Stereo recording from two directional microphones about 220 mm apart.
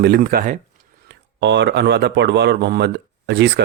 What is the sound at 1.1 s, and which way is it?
Speech, 55° right (ahead or behind).